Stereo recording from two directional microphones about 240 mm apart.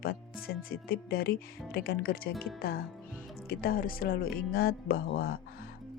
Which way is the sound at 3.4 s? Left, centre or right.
Left.